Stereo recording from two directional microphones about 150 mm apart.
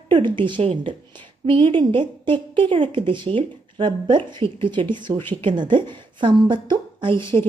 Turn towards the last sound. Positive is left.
turn(degrees=-35)  # may be behind; listen again after turning